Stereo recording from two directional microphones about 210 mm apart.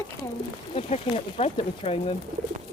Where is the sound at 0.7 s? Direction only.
30° left (ahead or behind).